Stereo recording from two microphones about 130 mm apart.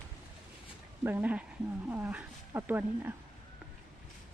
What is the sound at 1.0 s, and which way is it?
Speech, 15° right (ahead or behind).